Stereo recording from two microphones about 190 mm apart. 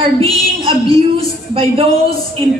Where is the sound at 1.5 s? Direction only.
30° right (ahead or behind).